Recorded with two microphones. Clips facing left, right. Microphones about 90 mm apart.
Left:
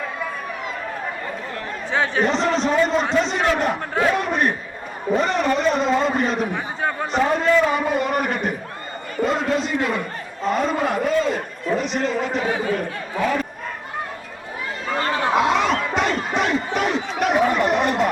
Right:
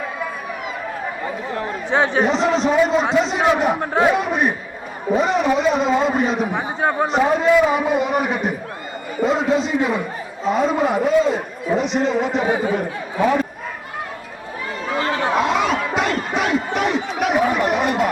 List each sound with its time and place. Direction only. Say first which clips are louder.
1.0 s chatter: right 3 dB; 15° right (ahead or behind)
2.2 s a man's voice: right 2 dB; 5° right (ahead or behind)
3.8 s a man's voice: right 4 dB; 20° right (ahead or behind)
4.1 s a man's voice: right 2 dB; 5° right (ahead or behind)
6.6 s a sound: right 5 dB; 20° right (ahead or behind)
7.1 s a man's voice: right 1 dB; 5° right (ahead or behind)
14.8 s crowd: right 1 dB; 5° right (ahead or behind)